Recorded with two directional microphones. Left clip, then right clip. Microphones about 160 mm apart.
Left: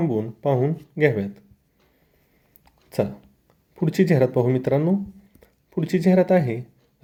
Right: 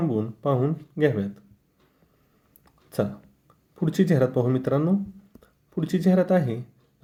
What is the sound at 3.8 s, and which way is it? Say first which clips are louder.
Speech: left 3 dB; 20° left (ahead or behind).